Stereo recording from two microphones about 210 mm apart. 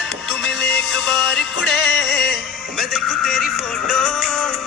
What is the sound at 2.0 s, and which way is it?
Music, 50° left (ahead or behind).